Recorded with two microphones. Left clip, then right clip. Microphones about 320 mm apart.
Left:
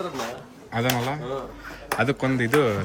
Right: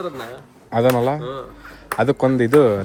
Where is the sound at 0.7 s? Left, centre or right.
Centre.